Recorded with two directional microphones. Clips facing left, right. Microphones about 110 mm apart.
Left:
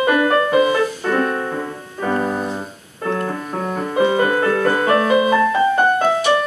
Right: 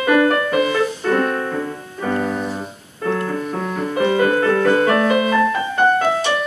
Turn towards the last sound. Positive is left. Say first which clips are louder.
# left 1 dB
turn(degrees=25)  # may be behind; listen again after turning